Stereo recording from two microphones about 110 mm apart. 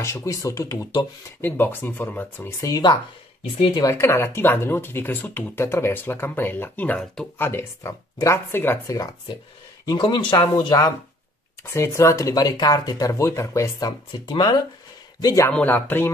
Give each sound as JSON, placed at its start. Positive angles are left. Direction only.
{"t": 0.0, "sound": "speech", "side_deg": 25}
{"t": 1.4, "sound": "speech", "side_deg": 20}
{"t": 2.6, "sound": "speech", "side_deg": 35}
{"t": 3.9, "sound": "speech", "side_deg": 20}
{"t": 9.8, "sound": "speech", "side_deg": 40}
{"t": 11.6, "sound": "speech", "side_deg": 25}
{"t": 15.5, "sound": "speech", "side_deg": 15}